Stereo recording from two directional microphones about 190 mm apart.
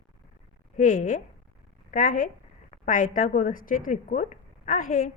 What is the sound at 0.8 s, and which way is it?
Speech, 40° left (ahead or behind).